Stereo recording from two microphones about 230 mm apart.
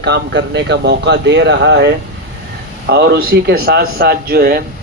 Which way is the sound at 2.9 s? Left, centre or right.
Right.